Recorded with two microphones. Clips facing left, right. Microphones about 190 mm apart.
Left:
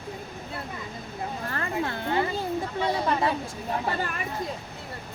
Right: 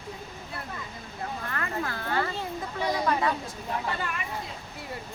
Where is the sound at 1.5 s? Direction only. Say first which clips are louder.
Left 4 dB; 30° left (ahead or behind).